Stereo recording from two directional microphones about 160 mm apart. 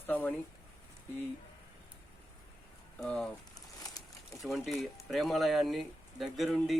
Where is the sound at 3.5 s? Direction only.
25° left (ahead or behind).